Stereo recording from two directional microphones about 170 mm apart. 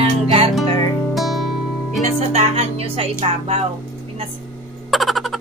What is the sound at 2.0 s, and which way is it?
Speech, 35° right (ahead or behind).